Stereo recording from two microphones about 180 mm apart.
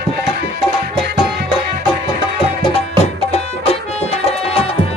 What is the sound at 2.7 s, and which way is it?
Music, 35° left (ahead or behind).